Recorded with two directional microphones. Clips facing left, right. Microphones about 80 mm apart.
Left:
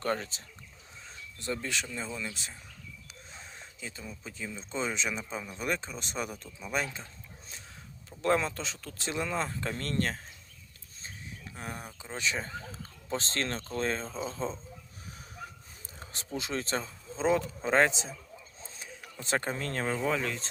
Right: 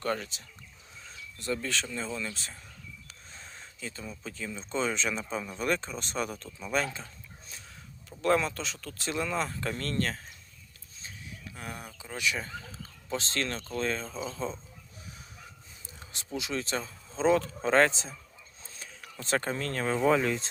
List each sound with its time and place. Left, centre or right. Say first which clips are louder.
0.0 s speech: even; left
1.4 s speech: right 2 dB; left
3.8 s speech: right 3 dB; centre
8.2 s speech: right 1 dB; left
11.5 s speech: left 1 dB; left
16.0 s speech: even; left
17.2 s speech: right 3 dB; centre
20.0 s speech: right 6 dB; centre